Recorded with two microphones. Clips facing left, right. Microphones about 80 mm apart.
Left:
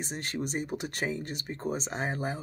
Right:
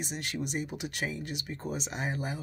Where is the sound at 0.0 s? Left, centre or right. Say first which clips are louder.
Left 1 dB; left.